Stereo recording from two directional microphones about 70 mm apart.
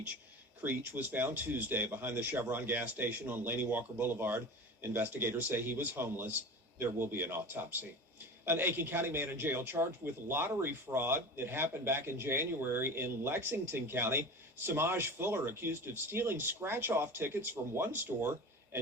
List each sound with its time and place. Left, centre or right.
0.6 s speech: right